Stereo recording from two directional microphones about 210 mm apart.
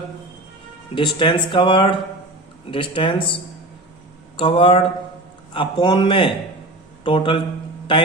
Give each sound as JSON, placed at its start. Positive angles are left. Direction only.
{"t": 0.9, "sound": "a man's voice", "side_deg": 20}